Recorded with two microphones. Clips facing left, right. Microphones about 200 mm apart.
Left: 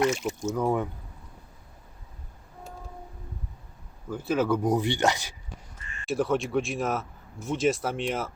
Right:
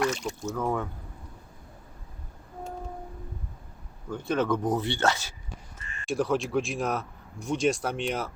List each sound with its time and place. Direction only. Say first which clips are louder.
0.1 s a man's voice: left 3 dB; 5° left (ahead or behind)
0.5 s speech: left 3 dB; 15° left (ahead or behind)
4.1 s speech: left 1 dB; 5° left (ahead or behind)
6.1 s a man's voice: left 1 dB; centre (ahead or behind)